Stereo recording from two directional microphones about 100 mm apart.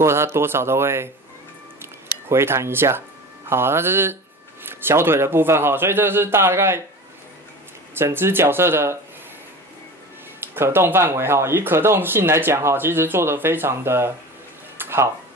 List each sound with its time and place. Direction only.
0.0 s speech: 25° right (ahead or behind)
2.2 s speech: 25° right (ahead or behind)
7.9 s speech: 25° right (ahead or behind)
10.4 s speech: 25° right (ahead or behind)
14.8 s a sound: 25° right (ahead or behind)